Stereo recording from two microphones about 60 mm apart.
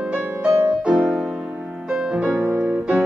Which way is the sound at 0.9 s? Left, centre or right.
Centre.